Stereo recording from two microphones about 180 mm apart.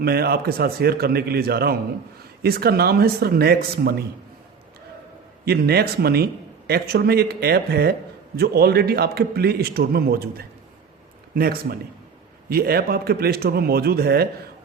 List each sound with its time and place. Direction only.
0.0 s a man's voice: 60° right (ahead or behind)
5.5 s a man's voice: 60° right (ahead or behind)